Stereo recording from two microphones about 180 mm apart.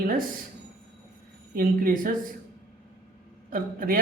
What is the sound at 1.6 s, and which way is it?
Speech, 50° right (ahead or behind).